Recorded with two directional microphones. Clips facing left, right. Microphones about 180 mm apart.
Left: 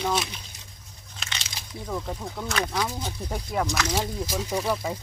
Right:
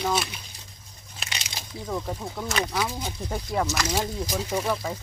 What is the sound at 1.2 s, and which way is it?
Biting, 10° right (ahead or behind).